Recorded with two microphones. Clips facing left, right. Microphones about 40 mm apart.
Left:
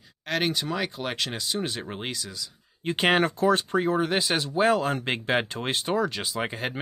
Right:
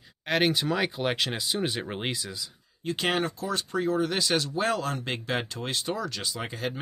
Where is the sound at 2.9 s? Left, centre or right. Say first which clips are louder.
Left 5 dB; left; by 4.9 s centre.